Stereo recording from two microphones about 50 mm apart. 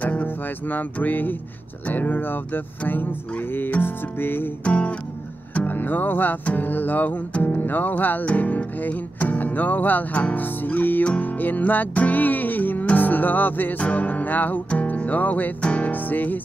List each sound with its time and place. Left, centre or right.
0.0 s music: left
4.6 s music: left
5.5 s music: left
14.7 s music: left